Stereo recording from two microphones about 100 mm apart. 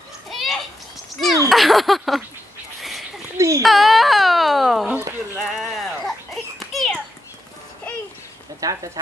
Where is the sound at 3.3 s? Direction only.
30° right (ahead or behind).